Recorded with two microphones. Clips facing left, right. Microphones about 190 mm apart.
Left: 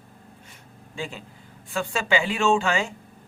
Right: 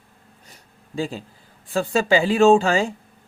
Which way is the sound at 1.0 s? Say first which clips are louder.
Right 7 dB; 35° right (ahead or behind).